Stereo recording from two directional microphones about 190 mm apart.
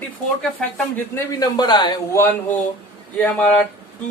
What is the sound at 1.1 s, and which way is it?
A man's voice, 20° left (ahead or behind).